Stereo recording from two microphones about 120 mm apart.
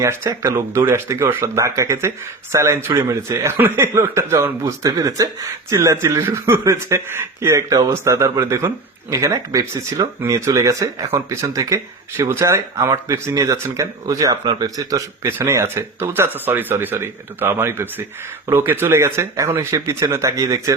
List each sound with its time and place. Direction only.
0.0 s speech: 25° right (ahead or behind)